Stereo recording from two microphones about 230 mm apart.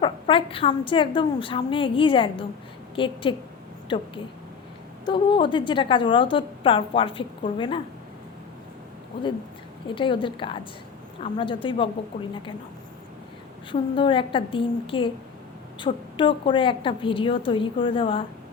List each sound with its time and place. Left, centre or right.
0.0 s a woman's voice: left
9.9 s a woman's voice: left
13.7 s a woman's voice: left